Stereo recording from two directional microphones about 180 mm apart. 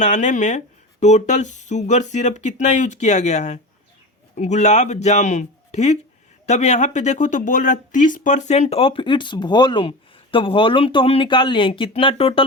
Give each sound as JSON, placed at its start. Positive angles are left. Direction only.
{"t": 0.0, "sound": "speech", "side_deg": 40}